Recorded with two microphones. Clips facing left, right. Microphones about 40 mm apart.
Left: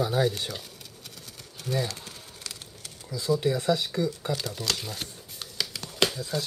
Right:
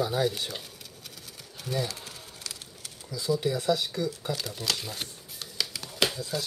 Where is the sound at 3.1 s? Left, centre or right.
Centre.